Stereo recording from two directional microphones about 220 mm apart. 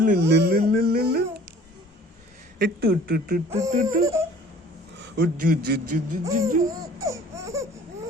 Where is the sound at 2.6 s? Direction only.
45° right (ahead or behind).